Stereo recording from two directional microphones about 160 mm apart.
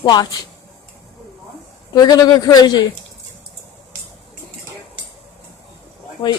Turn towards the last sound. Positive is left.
turn(degrees=25)  # may be behind; listen again after turning